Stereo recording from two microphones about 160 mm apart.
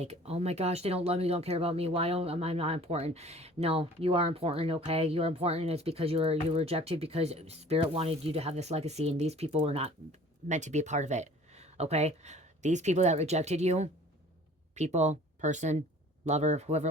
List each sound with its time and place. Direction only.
0.0 s speech: 40° right (ahead or behind)